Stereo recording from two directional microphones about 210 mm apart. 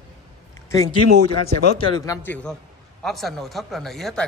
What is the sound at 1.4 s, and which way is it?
A man's voice, 20° left (ahead or behind).